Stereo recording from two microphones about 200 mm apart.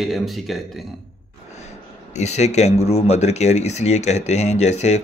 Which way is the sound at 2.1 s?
35° left (ahead or behind).